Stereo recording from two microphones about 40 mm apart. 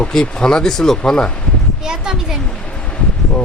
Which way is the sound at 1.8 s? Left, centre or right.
Centre.